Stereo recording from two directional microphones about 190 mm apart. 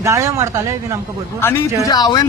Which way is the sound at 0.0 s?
15° right (ahead or behind).